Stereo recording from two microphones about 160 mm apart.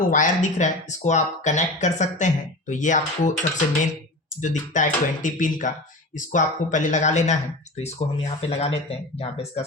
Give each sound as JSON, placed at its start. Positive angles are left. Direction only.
{"t": 0.0, "sound": "speech", "side_deg": 55}
{"t": 4.4, "sound": "speech", "side_deg": 50}